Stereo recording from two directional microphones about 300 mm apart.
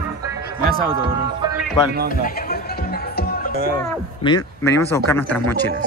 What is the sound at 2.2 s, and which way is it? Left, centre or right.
Music, left.